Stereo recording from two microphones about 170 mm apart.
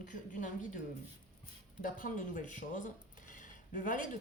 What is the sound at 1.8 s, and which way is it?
Speech, 50° left (ahead or behind).